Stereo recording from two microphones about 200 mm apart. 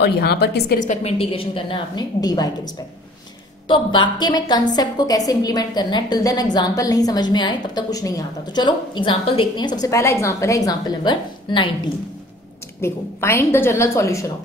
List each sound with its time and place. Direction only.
0.0 s a woman's voice: 55° left (ahead or behind)
0.8 s a woman's voice: 30° left (ahead or behind)
3.6 s a woman's voice: 25° left (ahead or behind)
12.8 s a woman's voice: 10° left (ahead or behind)